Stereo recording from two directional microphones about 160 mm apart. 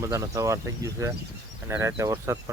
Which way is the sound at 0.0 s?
20° right (ahead or behind).